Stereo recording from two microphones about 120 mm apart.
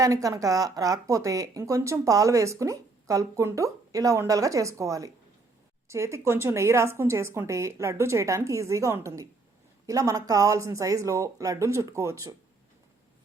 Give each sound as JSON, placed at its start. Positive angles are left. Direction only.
{"t": 0.0, "sound": "speech", "side_deg": -25}